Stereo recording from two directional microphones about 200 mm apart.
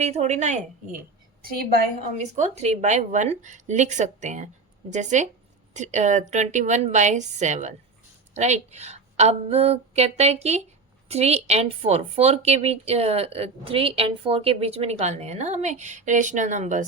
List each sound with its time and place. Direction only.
0.0 s speech: 35° right (ahead or behind)
1.4 s a woman's voice: 50° right (ahead or behind)
2.3 s speech: 35° right (ahead or behind)